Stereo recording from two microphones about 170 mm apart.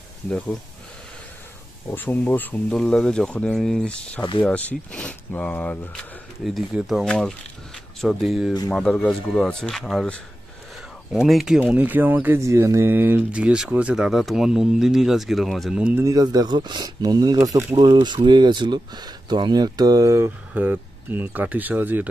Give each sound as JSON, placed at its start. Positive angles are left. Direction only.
{"t": 1.9, "sound": "speech", "side_deg": 10}
{"t": 16.0, "sound": "speech", "side_deg": -20}
{"t": 17.7, "sound": "speech", "side_deg": -25}